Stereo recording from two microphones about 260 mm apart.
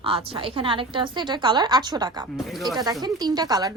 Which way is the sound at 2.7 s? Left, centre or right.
Centre.